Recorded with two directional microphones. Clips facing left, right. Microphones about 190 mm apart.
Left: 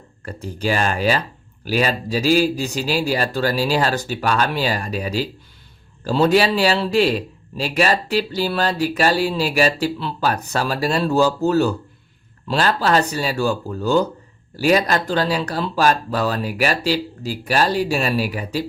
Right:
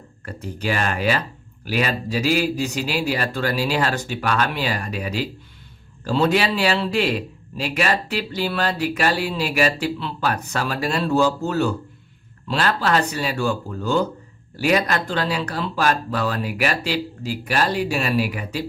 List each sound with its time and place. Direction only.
0.3 s speech: 30° left (ahead or behind)